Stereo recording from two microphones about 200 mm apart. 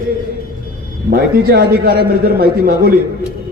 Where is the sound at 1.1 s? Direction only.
50° right (ahead or behind).